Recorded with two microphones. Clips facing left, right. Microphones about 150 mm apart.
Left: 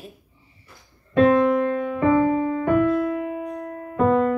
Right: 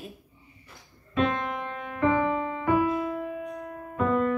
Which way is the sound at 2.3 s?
55° left (ahead or behind).